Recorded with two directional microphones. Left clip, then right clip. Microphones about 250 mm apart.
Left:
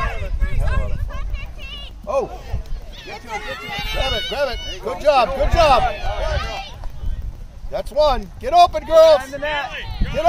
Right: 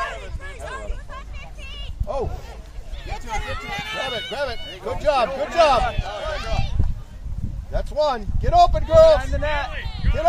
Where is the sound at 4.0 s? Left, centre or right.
Left.